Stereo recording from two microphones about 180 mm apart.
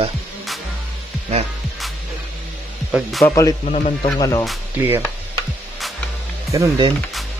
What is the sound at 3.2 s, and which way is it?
A man's voice, 15° left (ahead or behind).